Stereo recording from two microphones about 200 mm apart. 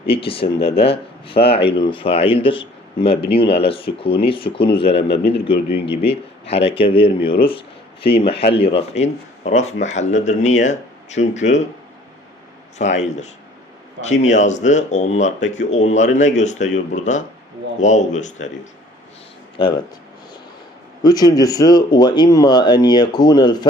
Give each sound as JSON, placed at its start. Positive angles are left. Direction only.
{"t": 0.0, "sound": "speech", "side_deg": 30}
{"t": 12.8, "sound": "speech", "side_deg": 35}
{"t": 19.5, "sound": "speech", "side_deg": 25}
{"t": 21.0, "sound": "speech", "side_deg": 20}